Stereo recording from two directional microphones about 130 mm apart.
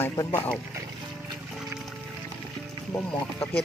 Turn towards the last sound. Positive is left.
turn(degrees=10)  # may be behind; listen again after turning